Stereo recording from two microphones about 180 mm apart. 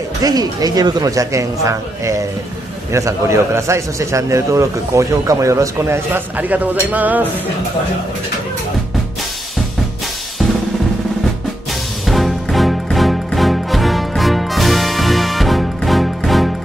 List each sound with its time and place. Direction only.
0.2 s speech: 20° right (ahead or behind)
12.1 s music: centre (ahead or behind)